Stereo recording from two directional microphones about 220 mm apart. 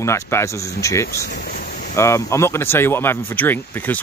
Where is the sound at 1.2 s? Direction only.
40° left (ahead or behind).